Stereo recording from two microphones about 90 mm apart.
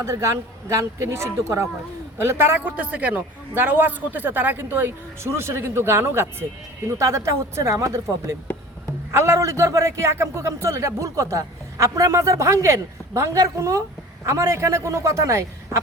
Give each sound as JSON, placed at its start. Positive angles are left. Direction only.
{"t": 0.0, "sound": "a man's voice", "side_deg": -35}
{"t": 9.1, "sound": "a man's voice", "side_deg": -30}